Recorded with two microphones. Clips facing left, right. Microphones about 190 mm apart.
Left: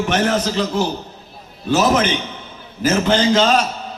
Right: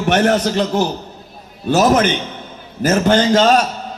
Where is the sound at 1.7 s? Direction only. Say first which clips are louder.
Right 3 dB; 45° right (ahead or behind).